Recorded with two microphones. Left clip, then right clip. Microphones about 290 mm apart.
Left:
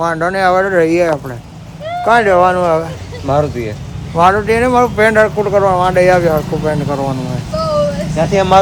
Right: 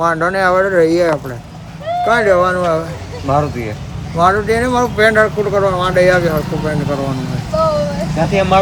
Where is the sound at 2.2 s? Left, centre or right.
Centre.